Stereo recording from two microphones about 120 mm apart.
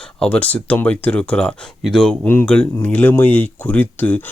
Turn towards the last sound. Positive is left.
turn(degrees=15)  # may be behind; listen again after turning